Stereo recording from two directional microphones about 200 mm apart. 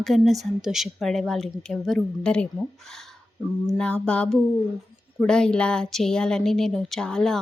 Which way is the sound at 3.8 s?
5° left (ahead or behind).